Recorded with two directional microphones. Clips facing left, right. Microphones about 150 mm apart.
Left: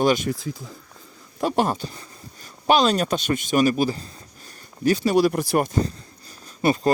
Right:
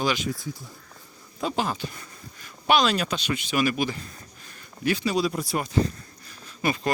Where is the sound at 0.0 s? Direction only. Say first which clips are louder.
Left 6 dB; 50° left (ahead or behind).